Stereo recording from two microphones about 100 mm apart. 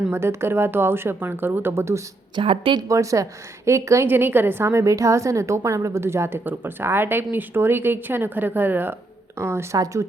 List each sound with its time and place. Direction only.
0.1 s a woman's voice: 25° right (ahead or behind)
2.3 s a woman's voice: 60° right (ahead or behind)
2.9 s a woman's voice: 35° right (ahead or behind)